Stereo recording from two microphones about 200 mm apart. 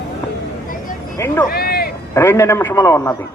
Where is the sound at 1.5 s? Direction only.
50° left (ahead or behind).